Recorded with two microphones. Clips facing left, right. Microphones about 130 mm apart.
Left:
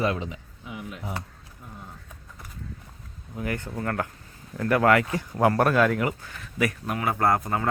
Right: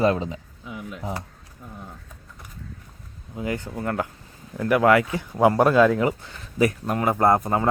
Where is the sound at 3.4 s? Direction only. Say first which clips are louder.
Right 2 dB; 20° right (ahead or behind).